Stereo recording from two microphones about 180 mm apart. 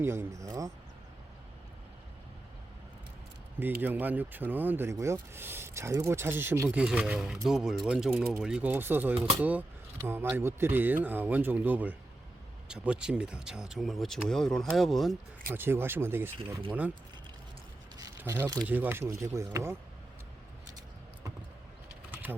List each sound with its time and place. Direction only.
0.0 s speech: 15° right (ahead or behind)
3.8 s speech: 10° right (ahead or behind)
15.4 s speech: 10° right (ahead or behind)
18.2 s speech: 15° right (ahead or behind)